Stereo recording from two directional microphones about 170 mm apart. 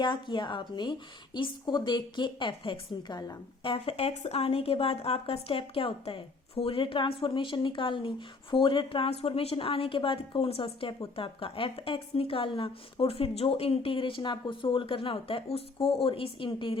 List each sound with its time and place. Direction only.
0.0 s a woman's voice: 25° left (ahead or behind)